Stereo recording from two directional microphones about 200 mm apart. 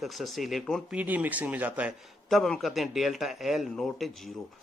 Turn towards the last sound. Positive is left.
turn(degrees=0)  # may be behind; listen again after turning